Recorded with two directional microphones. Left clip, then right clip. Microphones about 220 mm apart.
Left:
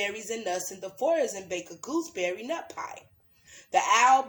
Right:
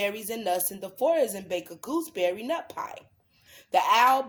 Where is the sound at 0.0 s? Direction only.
40° right (ahead or behind).